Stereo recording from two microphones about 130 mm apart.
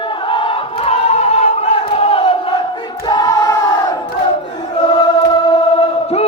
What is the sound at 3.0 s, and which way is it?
Choir, 30° left (ahead or behind).